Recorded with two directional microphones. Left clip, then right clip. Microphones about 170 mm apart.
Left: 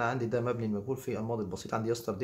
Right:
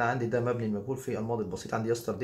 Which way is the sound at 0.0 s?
20° left (ahead or behind).